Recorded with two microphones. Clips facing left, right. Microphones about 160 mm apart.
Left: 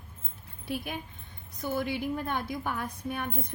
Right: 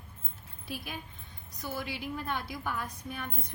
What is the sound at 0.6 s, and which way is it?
A woman's voice, 55° left (ahead or behind).